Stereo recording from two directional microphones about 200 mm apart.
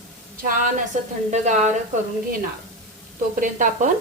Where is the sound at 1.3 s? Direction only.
35° right (ahead or behind).